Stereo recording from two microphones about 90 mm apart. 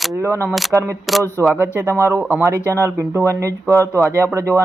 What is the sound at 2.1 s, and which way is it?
Speech, 20° right (ahead or behind).